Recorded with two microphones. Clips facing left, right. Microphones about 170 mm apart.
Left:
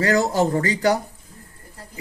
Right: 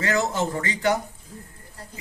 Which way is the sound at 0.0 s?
35° left (ahead or behind).